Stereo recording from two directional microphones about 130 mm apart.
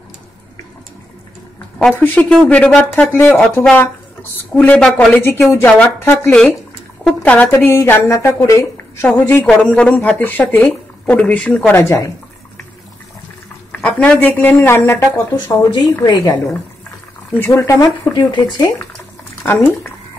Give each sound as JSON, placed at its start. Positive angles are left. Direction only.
{"t": 2.0, "sound": "speech", "side_deg": 10}
{"t": 13.7, "sound": "speech", "side_deg": 10}
{"t": 17.3, "sound": "speech", "side_deg": 20}
{"t": 17.8, "sound": "speech", "side_deg": 35}
{"t": 19.4, "sound": "speech", "side_deg": 15}